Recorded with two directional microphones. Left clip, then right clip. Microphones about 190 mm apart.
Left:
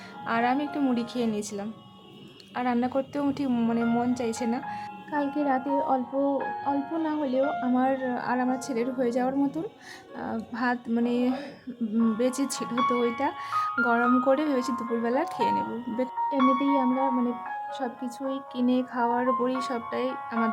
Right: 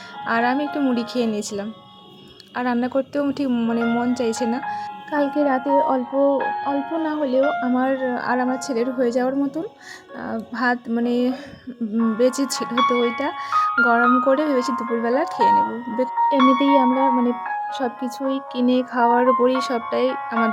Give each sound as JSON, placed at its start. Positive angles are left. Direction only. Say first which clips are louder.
{"t": 0.3, "sound": "a woman's voice", "louder": "right 5 dB", "side_deg": -25}
{"t": 15.6, "sound": "speech", "louder": "right 8 dB", "side_deg": -30}